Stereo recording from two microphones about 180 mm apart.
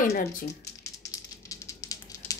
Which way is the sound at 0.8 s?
15° left (ahead or behind).